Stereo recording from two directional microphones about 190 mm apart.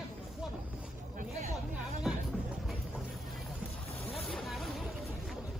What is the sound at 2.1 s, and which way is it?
Music, centre (ahead or behind).